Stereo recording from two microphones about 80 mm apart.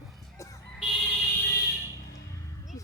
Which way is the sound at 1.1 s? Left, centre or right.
Left.